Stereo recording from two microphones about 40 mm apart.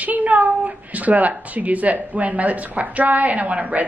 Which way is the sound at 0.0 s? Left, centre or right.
Right.